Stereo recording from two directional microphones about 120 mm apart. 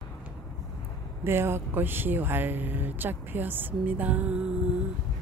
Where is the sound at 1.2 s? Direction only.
20° right (ahead or behind).